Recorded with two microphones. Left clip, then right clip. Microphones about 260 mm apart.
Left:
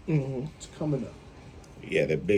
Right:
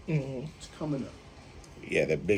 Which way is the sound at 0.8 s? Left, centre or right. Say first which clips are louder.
Left 4 dB; left.